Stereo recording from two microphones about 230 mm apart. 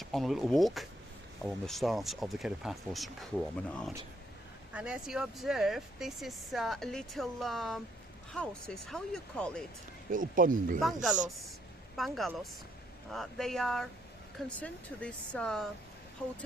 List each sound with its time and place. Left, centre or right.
0.0 s speech: centre
10.1 s speech: right
10.8 s speech: centre